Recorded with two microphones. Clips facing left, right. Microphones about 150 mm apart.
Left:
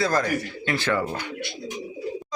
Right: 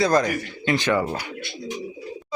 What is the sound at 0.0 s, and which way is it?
A man's voice, 20° right (ahead or behind).